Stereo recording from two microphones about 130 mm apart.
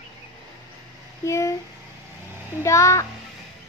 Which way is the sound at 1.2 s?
20° left (ahead or behind).